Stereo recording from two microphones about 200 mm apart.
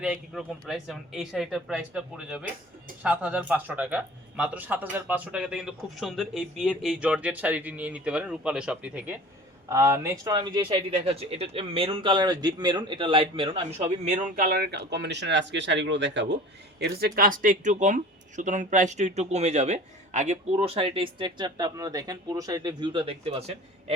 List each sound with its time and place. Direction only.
0.0 s speech: 5° right (ahead or behind); by 16.4 s 60° right (ahead or behind)
16.8 s speech: 50° right (ahead or behind); by 23.6 s 30° right (ahead or behind)